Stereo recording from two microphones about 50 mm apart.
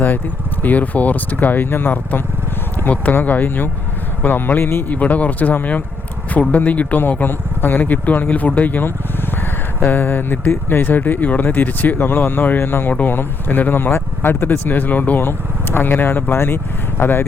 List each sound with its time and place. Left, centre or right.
0.6 s speech: left
2.9 s speech: left
4.9 s speech: left